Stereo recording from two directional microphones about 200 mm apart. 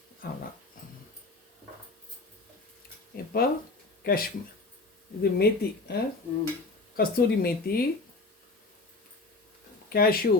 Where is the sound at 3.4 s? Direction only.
45° left (ahead or behind).